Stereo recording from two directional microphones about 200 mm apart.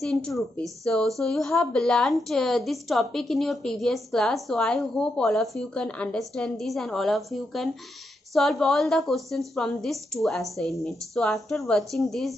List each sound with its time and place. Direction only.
0.0 s a woman's voice: centre (ahead or behind)